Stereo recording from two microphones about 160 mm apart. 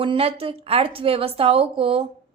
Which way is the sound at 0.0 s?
35° right (ahead or behind).